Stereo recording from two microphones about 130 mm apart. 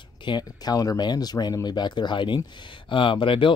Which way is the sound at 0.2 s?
35° left (ahead or behind).